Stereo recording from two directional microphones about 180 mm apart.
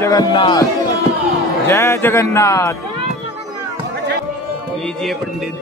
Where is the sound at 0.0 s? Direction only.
20° left (ahead or behind).